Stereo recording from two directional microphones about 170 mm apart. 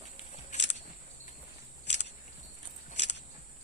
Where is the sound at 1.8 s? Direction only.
90° left.